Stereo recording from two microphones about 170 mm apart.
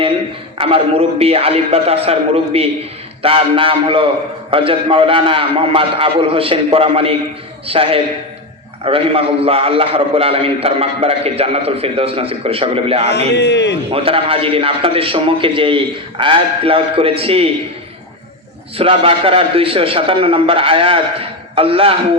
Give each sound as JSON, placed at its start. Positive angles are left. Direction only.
{"t": 0.6, "sound": "a man's voice", "side_deg": -35}
{"t": 13.1, "sound": "a man's voice", "side_deg": 85}
{"t": 13.9, "sound": "a man's voice", "side_deg": -35}
{"t": 18.8, "sound": "a man's voice", "side_deg": -35}